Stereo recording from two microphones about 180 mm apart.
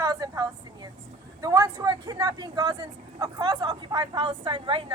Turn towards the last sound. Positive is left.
turn(degrees=-30)  # may be behind; listen again after turning